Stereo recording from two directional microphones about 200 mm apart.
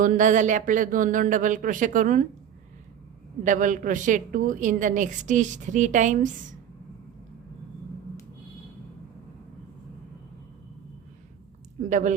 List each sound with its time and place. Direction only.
0.0 s a woman's voice: 40° right (ahead or behind)
3.4 s a woman's voice: 40° right (ahead or behind)
11.9 s a woman's voice: 40° right (ahead or behind)